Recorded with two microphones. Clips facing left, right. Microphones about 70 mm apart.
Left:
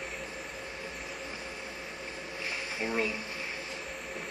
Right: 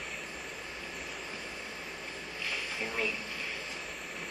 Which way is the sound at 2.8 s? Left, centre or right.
Left.